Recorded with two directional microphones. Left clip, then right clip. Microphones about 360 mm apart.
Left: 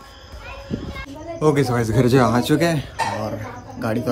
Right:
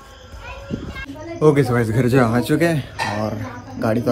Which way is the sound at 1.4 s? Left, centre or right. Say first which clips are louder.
Right 3 dB; centre.